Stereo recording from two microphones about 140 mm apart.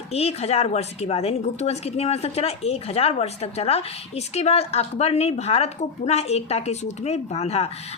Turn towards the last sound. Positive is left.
turn(degrees=50)  # may be behind; listen again after turning